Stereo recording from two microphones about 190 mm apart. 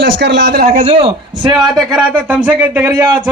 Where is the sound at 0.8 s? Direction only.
30° right (ahead or behind).